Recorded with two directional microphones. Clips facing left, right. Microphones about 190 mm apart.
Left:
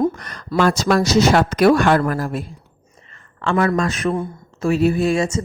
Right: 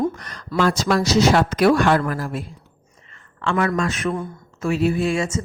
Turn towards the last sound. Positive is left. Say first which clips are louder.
# left 3 dB
turn(degrees=40)  # may be behind; listen again after turning